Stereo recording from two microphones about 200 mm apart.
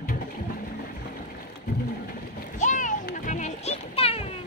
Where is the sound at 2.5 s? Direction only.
40° left (ahead or behind).